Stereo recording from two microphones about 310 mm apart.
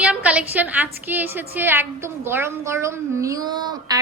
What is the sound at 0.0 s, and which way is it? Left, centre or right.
A woman's voice, centre.